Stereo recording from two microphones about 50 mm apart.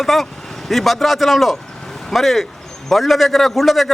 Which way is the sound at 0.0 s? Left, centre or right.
Centre.